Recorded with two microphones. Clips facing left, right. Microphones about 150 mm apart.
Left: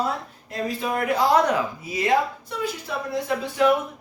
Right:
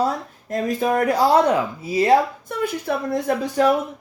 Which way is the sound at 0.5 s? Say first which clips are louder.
Right 6 dB; 45° right (ahead or behind).